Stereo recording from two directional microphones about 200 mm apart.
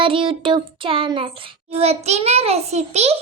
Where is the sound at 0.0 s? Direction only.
25° right (ahead or behind).